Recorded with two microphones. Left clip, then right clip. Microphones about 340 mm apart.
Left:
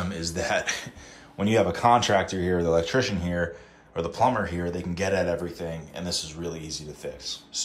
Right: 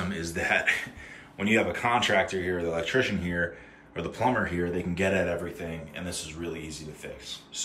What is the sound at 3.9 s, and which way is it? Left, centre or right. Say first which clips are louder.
Speech: left 3 dB; centre.